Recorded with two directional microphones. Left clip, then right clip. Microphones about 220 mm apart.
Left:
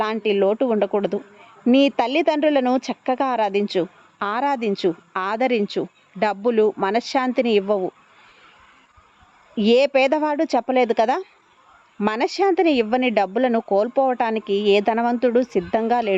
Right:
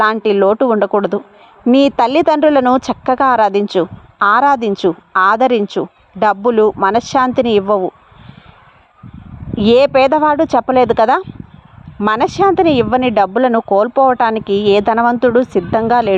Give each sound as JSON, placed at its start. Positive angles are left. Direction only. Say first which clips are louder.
{"t": 0.0, "sound": "speech", "louder": "right 8 dB", "side_deg": -20}
{"t": 9.6, "sound": "speech", "louder": "right 7 dB", "side_deg": -15}
{"t": 14.4, "sound": "a woman's voice", "louder": "right 7 dB", "side_deg": 10}
{"t": 14.7, "sound": "speech", "louder": "right 7 dB", "side_deg": -15}